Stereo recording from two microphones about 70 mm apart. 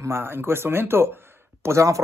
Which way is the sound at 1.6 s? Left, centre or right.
Right.